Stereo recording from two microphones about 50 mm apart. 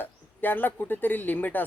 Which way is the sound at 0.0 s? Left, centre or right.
Left.